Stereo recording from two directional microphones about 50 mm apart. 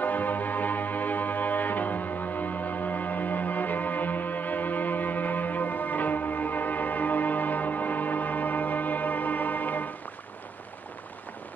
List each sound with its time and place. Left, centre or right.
0.0 s music: left